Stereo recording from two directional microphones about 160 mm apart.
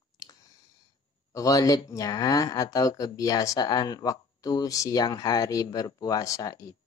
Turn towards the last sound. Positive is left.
turn(degrees=20)  # may be behind; listen again after turning